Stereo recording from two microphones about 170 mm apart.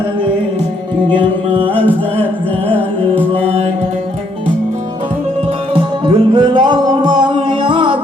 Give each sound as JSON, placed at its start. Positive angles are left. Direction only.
{"t": 1.1, "sound": "music", "side_deg": -30}
{"t": 1.7, "sound": "music", "side_deg": 10}
{"t": 5.7, "sound": "music", "side_deg": -30}